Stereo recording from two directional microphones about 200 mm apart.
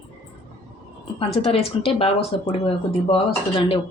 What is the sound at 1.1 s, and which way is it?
Speech, 30° left (ahead or behind).